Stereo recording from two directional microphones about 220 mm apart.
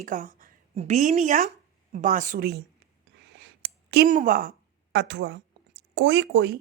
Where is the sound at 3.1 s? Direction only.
50° right (ahead or behind).